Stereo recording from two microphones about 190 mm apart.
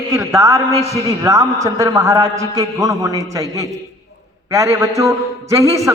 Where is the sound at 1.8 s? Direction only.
15° right (ahead or behind).